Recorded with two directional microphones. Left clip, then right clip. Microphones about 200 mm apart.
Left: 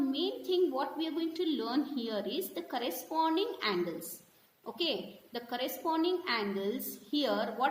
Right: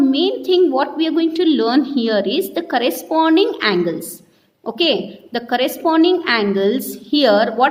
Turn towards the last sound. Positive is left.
turn(degrees=-45)  # may be behind; listen again after turning